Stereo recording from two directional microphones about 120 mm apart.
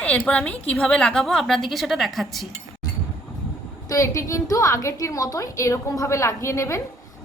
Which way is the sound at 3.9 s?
25° left (ahead or behind).